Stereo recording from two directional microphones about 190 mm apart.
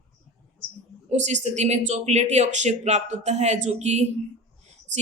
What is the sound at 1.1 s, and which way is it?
Speech, 40° right (ahead or behind).